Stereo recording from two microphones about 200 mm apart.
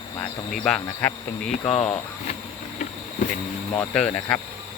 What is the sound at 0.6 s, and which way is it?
Insect, 5° left (ahead or behind).